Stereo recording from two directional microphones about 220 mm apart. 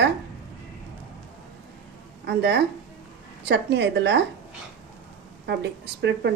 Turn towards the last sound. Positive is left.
turn(degrees=-50)  # may be behind; listen again after turning